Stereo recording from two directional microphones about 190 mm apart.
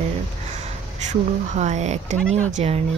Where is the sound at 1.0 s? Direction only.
40° right (ahead or behind).